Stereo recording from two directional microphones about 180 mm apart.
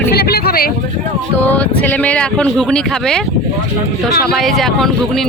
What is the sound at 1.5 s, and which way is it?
Speech, 10° left (ahead or behind).